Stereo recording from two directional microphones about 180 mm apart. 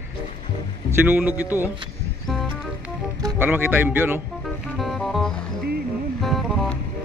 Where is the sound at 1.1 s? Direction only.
10° right (ahead or behind).